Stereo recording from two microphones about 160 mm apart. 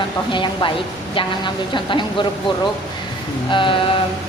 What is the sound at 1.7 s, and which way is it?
Speech, 30° left (ahead or behind).